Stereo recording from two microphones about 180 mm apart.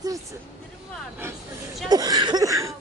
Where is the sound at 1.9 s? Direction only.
20° right (ahead or behind).